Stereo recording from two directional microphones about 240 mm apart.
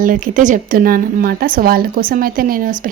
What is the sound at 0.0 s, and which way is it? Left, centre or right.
A woman's voice, right.